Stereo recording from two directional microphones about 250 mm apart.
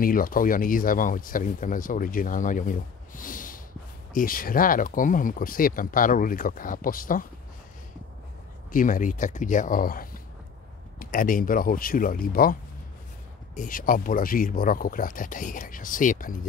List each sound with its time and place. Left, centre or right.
0.0 s speech: left
8.7 s speech: left
13.6 s speech: left